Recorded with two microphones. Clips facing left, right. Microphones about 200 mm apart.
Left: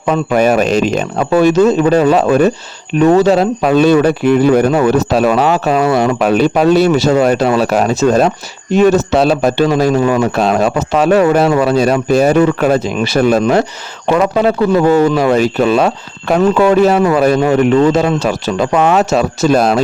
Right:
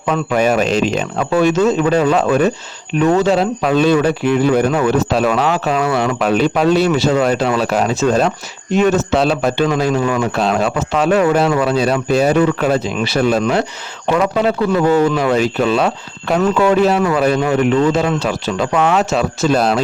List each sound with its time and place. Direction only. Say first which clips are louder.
0.1 s speech: left 4 dB; 40° left (ahead or behind)